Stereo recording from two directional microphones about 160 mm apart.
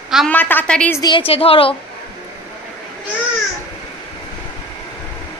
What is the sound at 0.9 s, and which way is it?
Speech, 30° left (ahead or behind).